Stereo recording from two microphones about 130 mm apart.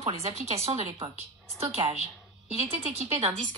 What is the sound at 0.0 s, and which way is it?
Speech, 55° right (ahead or behind).